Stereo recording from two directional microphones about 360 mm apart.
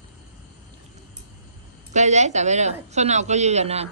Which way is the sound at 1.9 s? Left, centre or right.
Centre.